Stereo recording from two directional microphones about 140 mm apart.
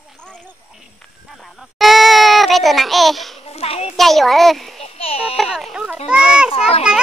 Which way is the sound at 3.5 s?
45° left (ahead or behind).